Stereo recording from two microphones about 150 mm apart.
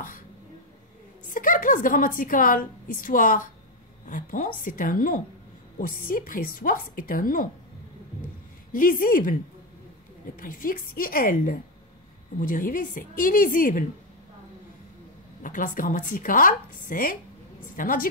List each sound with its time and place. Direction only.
1.3 s a woman's voice: 65° left (ahead or behind)
8.7 s a woman's voice: 70° left (ahead or behind)
10.4 s a woman's voice: 70° left (ahead or behind)
15.4 s a woman's voice: 65° left (ahead or behind)